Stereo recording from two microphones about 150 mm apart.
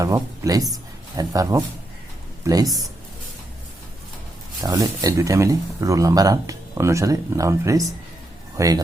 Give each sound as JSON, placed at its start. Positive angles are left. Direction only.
{"t": 0.0, "sound": "a woman's voice", "side_deg": -20}
{"t": 4.6, "sound": "speech", "side_deg": -25}